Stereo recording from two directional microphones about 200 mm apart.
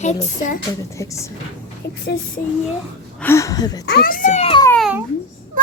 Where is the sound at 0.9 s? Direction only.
15° left (ahead or behind).